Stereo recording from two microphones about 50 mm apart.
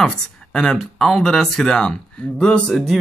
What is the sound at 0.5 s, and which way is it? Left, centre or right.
Speech, centre.